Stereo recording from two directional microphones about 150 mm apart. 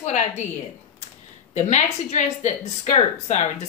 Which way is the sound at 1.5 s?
50° left (ahead or behind).